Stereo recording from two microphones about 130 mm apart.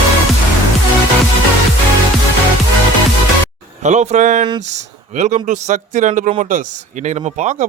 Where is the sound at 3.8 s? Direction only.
65° right (ahead or behind).